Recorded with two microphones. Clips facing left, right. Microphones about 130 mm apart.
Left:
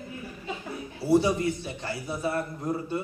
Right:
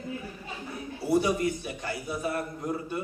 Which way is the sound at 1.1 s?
30° left (ahead or behind).